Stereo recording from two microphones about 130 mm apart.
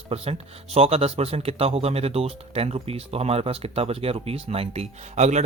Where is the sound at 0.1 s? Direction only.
50° right (ahead or behind).